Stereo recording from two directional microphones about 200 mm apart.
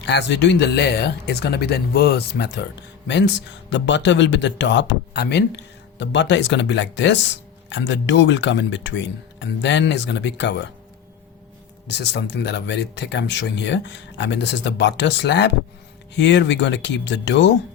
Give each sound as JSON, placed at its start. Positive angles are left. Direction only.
{"t": 0.0, "sound": "speech", "side_deg": 60}
{"t": 11.9, "sound": "speech", "side_deg": 60}